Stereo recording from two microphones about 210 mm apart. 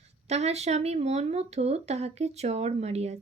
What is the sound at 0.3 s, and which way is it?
Speech, 30° right (ahead or behind).